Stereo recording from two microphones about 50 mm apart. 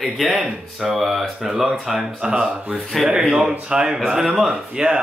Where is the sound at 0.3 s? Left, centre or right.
Centre.